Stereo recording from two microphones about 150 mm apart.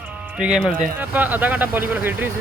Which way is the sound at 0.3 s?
5° right (ahead or behind).